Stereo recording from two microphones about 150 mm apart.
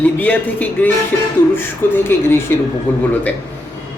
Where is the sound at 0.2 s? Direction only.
10° left (ahead or behind).